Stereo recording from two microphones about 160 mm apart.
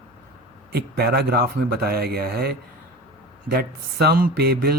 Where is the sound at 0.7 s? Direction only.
80° right.